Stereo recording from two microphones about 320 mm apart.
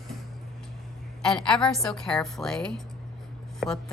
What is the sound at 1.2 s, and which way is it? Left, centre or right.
A woman's voice, centre.